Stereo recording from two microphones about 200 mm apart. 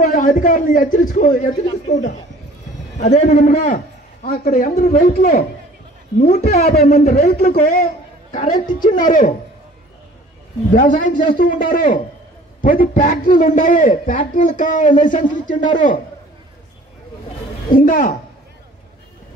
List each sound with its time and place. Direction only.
0.0 s a man's voice: 40° left (ahead or behind)
10.7 s a man's voice: 40° left (ahead or behind)
17.6 s a man's voice: 40° left (ahead or behind)